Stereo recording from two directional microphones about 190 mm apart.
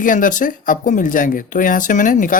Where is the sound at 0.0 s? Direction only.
45° left (ahead or behind).